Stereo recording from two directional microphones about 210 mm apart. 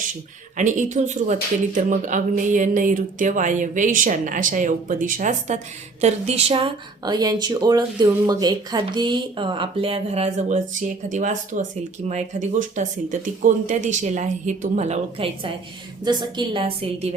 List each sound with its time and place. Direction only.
0.5 s speech: 35° right (ahead or behind)